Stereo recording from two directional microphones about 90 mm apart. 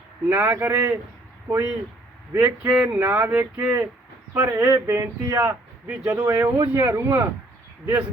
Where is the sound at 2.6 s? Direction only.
15° right (ahead or behind).